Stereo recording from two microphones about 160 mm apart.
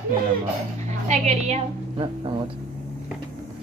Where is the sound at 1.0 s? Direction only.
45° right (ahead or behind).